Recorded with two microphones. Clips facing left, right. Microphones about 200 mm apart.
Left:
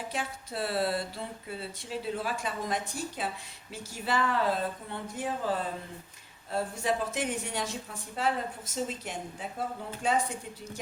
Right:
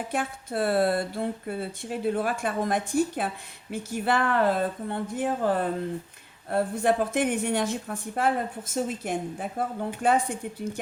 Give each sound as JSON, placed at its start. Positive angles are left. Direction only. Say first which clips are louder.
{"t": 0.1, "sound": "speech", "louder": "right 6 dB", "side_deg": -55}